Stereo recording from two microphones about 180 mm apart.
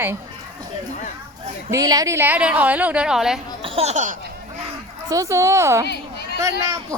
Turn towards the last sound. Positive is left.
turn(degrees=-20)  # may be behind; listen again after turning